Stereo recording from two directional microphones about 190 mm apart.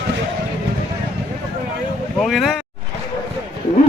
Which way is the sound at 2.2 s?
Centre (ahead or behind).